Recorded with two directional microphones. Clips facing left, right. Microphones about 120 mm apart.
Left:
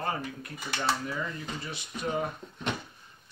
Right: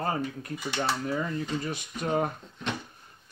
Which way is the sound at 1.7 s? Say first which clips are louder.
Right 1 dB; 50° right (ahead or behind).